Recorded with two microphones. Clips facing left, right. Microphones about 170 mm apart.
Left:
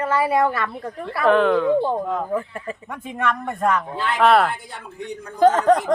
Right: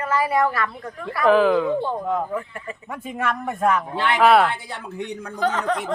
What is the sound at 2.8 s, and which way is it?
A woman's voice, 5° right (ahead or behind).